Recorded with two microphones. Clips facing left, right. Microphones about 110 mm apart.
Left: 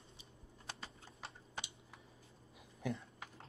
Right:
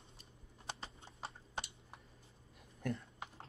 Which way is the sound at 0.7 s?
25° right (ahead or behind).